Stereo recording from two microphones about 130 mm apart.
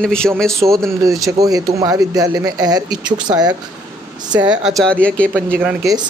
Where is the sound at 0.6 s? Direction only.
15° right (ahead or behind).